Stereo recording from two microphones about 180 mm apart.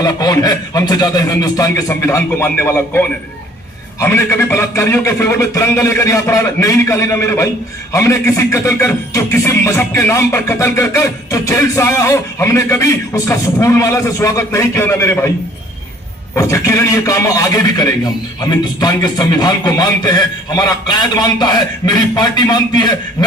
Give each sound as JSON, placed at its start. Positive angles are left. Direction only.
{"t": 0.0, "sound": "speech", "side_deg": 20}
{"t": 16.3, "sound": "a man's voice", "side_deg": 15}